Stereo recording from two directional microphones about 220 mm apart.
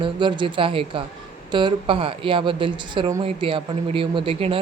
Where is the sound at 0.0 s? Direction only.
20° right (ahead or behind).